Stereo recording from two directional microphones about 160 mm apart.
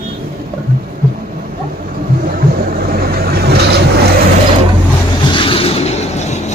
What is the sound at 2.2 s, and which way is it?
Vehicle, 65° right (ahead or behind).